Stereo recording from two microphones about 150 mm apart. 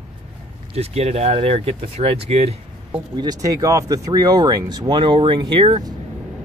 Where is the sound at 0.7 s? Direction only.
45° right (ahead or behind).